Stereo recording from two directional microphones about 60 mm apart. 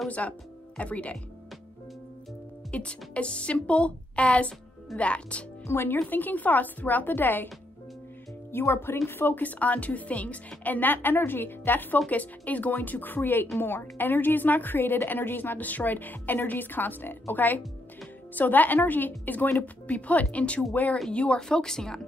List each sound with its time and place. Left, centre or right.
0.2 s a woman's voice: left
2.7 s a woman's voice: centre
5.7 s a woman's voice: left
8.5 s a woman's voice: left; by 22.0 s centre